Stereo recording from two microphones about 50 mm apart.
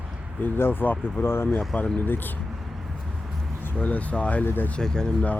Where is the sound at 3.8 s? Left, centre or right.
Left.